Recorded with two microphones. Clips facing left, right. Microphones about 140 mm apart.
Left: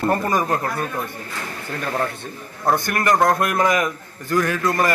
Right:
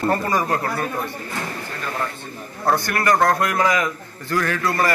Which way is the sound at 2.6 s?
20° left (ahead or behind).